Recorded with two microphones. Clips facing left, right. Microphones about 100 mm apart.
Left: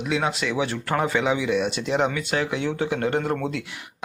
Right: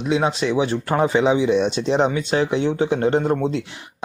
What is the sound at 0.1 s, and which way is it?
Speech, 25° right (ahead or behind).